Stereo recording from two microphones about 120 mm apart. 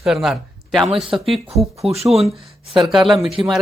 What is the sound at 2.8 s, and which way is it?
Speech, centre (ahead or behind).